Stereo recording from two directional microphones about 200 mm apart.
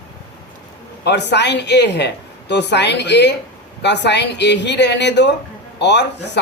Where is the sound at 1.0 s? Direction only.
60° left (ahead or behind).